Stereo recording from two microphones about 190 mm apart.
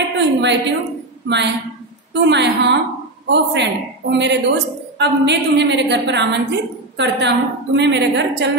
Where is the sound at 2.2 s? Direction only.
65° right (ahead or behind).